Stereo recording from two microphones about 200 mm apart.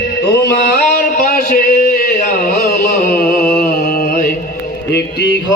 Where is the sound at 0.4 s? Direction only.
50° left (ahead or behind).